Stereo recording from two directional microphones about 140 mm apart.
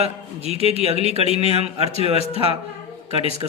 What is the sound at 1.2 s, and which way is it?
Speech, 45° left (ahead or behind).